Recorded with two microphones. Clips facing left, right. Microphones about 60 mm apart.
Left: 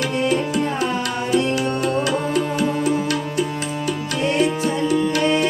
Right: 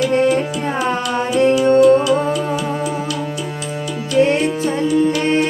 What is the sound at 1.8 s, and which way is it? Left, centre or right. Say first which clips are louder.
Music: right 9 dB; left.